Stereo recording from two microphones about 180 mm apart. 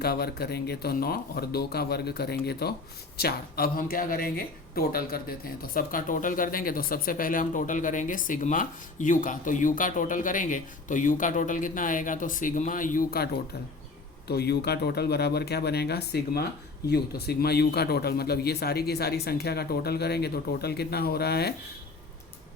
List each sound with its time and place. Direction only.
0.0 s a man's voice: 60° left (ahead or behind)